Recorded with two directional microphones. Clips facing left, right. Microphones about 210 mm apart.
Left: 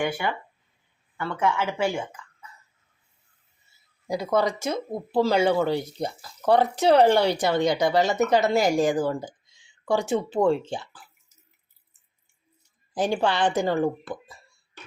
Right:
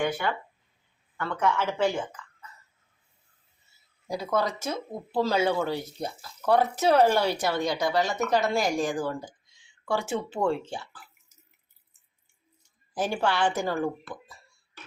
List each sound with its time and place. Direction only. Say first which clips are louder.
0.0 s speech: left 1 dB; 10° left (ahead or behind)
4.0 s speech: left 4 dB; 15° left (ahead or behind)
12.9 s speech: left 3 dB; 15° left (ahead or behind)